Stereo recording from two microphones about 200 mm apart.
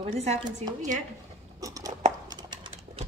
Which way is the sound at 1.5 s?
15° right (ahead or behind).